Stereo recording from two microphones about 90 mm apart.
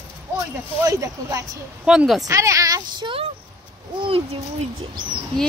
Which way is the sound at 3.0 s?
90° right.